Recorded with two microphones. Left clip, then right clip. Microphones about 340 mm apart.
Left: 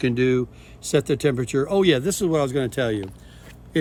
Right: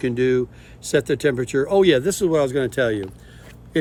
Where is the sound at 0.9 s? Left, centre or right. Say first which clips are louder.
Right 2 dB; centre.